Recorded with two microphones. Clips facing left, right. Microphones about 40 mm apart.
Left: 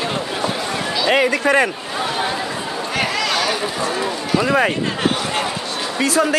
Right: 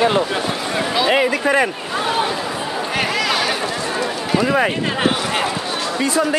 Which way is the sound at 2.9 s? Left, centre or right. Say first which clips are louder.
Even; centre.